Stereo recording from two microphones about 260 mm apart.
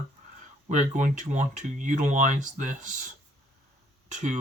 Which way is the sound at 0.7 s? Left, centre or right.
Right.